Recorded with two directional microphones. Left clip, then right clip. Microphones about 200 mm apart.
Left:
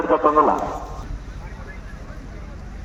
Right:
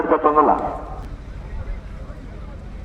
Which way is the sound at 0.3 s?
50° left (ahead or behind).